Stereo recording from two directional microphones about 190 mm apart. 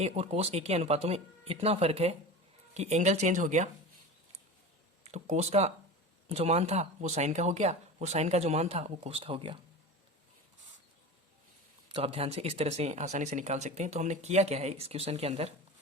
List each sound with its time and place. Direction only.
0.0 s speech: 35° right (ahead or behind)
5.0 s speech: 35° right (ahead or behind)
11.9 s speech: 30° right (ahead or behind)